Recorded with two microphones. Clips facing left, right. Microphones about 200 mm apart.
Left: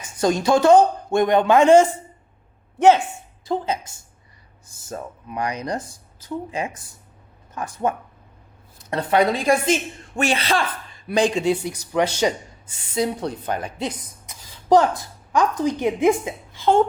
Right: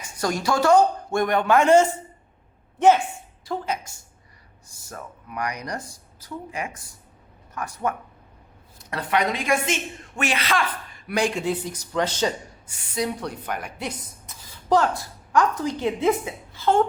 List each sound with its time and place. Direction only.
0.2 s speech: 20° left (ahead or behind)
3.4 s a woman's voice: 25° left (ahead or behind)
11.1 s speech: 20° left (ahead or behind)
12.9 s speech: 25° left (ahead or behind)